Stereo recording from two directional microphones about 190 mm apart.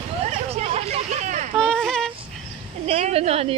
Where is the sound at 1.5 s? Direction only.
5° left (ahead or behind).